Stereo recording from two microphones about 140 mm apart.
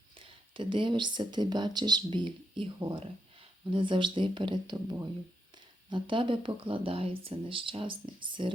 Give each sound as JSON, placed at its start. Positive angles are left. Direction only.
{"t": 0.2, "sound": "speech", "side_deg": -40}